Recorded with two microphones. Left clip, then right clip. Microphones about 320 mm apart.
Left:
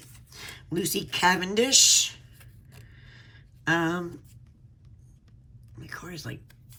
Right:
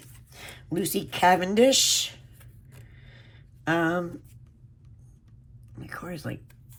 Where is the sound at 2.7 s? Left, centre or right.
Centre.